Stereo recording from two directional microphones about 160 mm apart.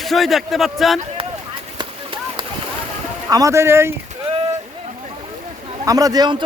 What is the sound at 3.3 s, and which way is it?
Speech, 20° right (ahead or behind).